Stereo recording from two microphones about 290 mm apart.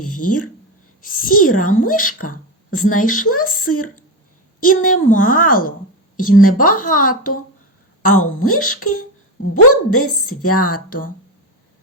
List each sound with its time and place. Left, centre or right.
0.2 s a woman's voice: left
1.4 s speech: left
2.7 s a woman's voice: left
3.0 s speech: left
3.5 s a woman's voice: left
4.6 s speech: left
6.1 s a woman's voice: left
6.4 s speech: left
8.0 s a woman's voice: left